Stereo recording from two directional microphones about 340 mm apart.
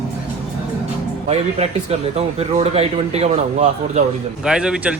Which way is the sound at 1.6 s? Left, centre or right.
Centre.